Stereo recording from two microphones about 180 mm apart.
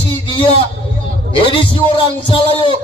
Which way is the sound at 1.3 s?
30° left (ahead or behind).